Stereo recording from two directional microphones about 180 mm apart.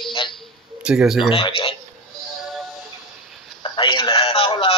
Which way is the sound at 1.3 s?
30° left (ahead or behind).